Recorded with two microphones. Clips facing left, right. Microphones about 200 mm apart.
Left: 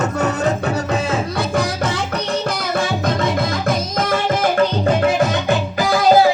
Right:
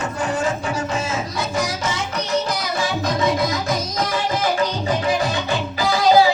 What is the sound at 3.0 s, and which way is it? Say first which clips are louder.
Music: left 1 dB; 55° left (ahead or behind).